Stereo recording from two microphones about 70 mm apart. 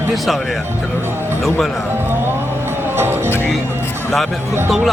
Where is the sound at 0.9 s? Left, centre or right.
Right.